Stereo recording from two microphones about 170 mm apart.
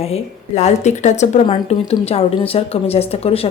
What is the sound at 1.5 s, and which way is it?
A woman's voice, 30° left (ahead or behind).